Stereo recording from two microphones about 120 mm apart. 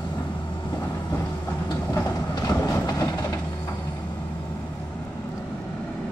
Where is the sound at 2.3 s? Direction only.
35° left (ahead or behind).